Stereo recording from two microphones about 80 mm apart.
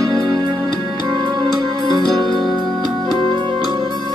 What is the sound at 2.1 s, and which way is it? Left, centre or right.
Music, right.